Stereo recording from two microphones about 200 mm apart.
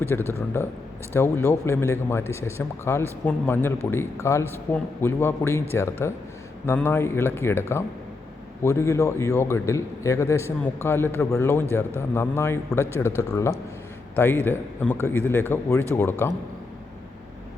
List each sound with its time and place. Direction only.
0.1 s a man's voice: 10° left (ahead or behind)